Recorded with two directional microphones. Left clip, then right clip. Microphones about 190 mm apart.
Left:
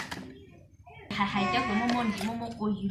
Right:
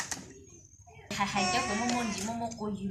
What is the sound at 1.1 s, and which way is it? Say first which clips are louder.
Music: left 1 dB; 50° right (ahead or behind).